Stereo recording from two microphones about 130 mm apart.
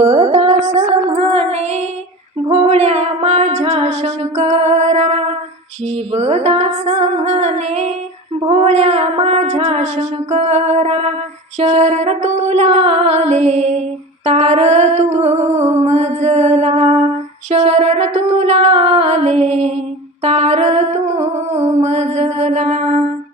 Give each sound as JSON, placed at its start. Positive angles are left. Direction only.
{"t": 0.0, "sound": "music", "side_deg": -55}
{"t": 1.1, "sound": "child singing", "side_deg": -50}
{"t": 2.5, "sound": "music", "side_deg": -50}
{"t": 6.1, "sound": "a sound", "side_deg": -55}
{"t": 8.4, "sound": "a sound", "side_deg": -45}
{"t": 15.8, "sound": "mantra", "side_deg": -60}
{"t": 17.5, "sound": "music", "side_deg": -55}